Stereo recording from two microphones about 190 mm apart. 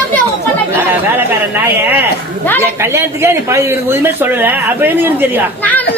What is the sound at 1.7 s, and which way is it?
A man's voice, 10° right (ahead or behind).